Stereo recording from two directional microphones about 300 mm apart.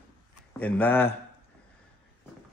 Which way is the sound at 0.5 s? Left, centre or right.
Centre.